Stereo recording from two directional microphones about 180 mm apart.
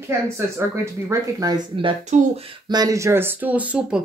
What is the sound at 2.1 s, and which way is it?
Speech, 40° right (ahead or behind).